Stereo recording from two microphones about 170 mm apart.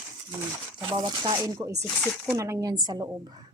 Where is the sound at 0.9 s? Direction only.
25° right (ahead or behind).